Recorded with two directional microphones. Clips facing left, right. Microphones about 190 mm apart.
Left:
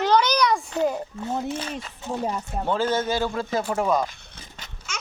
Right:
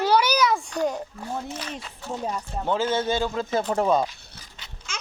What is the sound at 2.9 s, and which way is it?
Speech, 25° right (ahead or behind).